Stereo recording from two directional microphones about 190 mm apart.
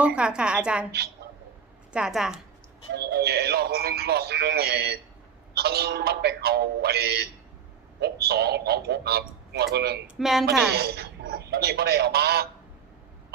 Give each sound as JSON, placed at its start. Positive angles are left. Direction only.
{"t": 0.0, "sound": "a woman's voice", "side_deg": -5}
{"t": 0.9, "sound": "speech", "side_deg": -55}
{"t": 1.9, "sound": "a woman's voice", "side_deg": -5}
{"t": 2.9, "sound": "speech", "side_deg": -60}
{"t": 10.2, "sound": "a woman's voice", "side_deg": 0}
{"t": 10.8, "sound": "speech", "side_deg": -55}